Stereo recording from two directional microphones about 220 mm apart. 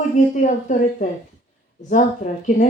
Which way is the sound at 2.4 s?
35° left (ahead or behind).